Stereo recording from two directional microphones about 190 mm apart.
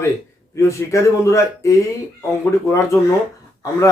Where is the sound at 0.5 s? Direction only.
15° left (ahead or behind).